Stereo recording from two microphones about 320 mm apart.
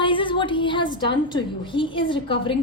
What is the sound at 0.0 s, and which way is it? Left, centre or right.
A woman's voice, centre.